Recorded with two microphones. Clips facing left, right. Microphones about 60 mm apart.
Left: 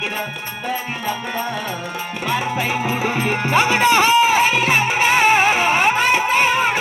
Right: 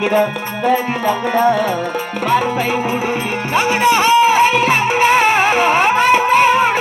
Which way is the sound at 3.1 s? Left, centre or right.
Left.